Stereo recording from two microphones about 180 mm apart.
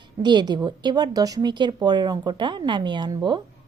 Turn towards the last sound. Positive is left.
turn(degrees=-25)  # may be behind; listen again after turning